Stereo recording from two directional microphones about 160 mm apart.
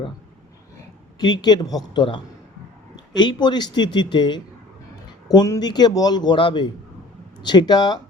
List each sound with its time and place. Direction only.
1.2 s a man's voice: 25° left (ahead or behind)